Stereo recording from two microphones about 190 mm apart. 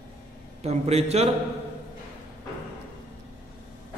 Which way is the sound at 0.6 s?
35° right (ahead or behind).